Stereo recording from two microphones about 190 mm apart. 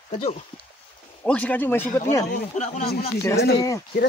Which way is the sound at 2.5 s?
40° left (ahead or behind).